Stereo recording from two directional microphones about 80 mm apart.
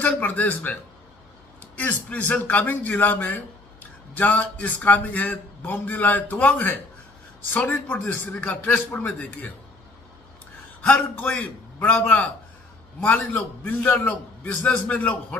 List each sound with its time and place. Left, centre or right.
0.0 s a man's voice: left
10.8 s a man's voice: left